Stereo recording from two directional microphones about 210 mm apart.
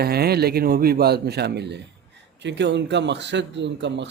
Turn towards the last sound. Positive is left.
turn(degrees=-55)  # may be behind; listen again after turning